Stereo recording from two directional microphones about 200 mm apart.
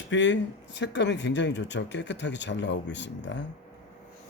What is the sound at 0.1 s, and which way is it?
Speech, 65° left (ahead or behind).